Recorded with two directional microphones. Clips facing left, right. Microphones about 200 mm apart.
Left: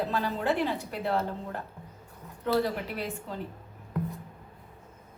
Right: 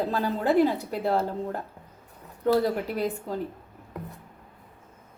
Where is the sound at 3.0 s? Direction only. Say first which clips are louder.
Right 6 dB; 45° right (ahead or behind).